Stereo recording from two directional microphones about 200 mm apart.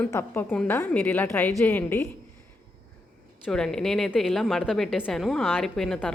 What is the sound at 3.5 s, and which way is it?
A woman's voice, 5° left (ahead or behind).